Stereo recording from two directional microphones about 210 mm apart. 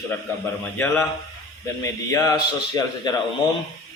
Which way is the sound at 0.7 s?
10° left (ahead or behind).